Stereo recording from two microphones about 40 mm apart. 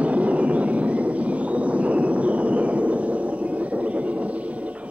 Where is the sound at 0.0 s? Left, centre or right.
Right.